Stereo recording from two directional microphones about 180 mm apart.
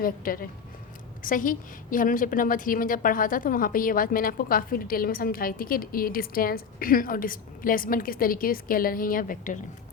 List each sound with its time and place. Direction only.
0.3 s a woman's voice: 50° left (ahead or behind)